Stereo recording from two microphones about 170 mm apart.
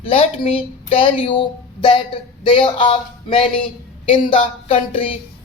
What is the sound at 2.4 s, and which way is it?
Music, 30° left (ahead or behind).